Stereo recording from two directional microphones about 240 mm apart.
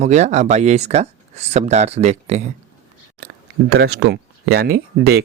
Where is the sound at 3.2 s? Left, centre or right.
Right.